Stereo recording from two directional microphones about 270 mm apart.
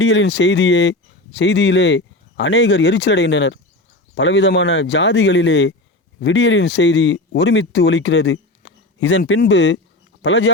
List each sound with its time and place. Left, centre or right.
0.0 s speech: left